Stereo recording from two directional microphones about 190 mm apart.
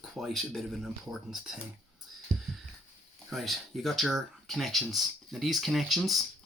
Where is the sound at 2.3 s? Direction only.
40° right (ahead or behind).